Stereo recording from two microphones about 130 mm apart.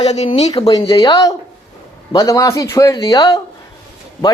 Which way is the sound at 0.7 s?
35° left (ahead or behind).